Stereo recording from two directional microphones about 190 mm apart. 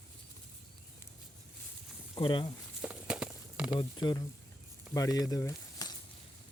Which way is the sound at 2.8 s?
5° right (ahead or behind).